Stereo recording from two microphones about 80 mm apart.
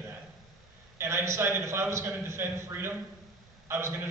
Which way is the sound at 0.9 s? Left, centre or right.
Right.